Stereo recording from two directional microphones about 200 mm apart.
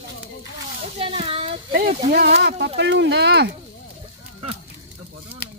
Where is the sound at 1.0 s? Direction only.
30° right (ahead or behind).